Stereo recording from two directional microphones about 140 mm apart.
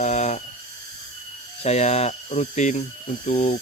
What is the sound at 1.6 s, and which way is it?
Speech, 50° left (ahead or behind).